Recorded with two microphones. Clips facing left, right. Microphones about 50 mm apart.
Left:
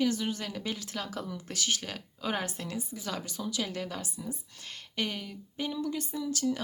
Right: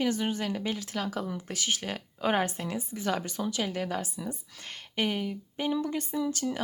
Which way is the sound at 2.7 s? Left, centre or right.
Right.